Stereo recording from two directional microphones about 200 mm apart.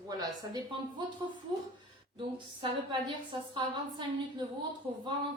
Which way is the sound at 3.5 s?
20° right (ahead or behind).